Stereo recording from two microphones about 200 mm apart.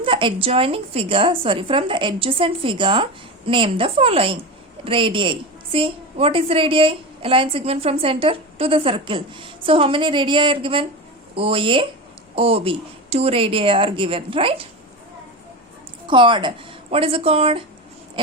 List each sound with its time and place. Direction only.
0.0 s a woman's voice: 25° right (ahead or behind)
16.0 s a woman's voice: 25° right (ahead or behind)